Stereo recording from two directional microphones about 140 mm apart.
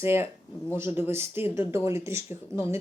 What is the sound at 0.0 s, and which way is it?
Speech, 15° right (ahead or behind).